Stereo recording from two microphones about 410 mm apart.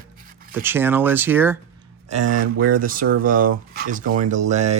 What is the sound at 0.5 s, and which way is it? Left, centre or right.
Speech, centre.